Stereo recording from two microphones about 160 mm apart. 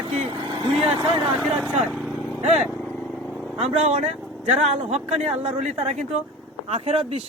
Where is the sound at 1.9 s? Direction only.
Centre (ahead or behind).